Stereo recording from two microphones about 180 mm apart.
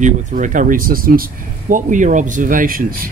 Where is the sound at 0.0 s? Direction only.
45° right (ahead or behind).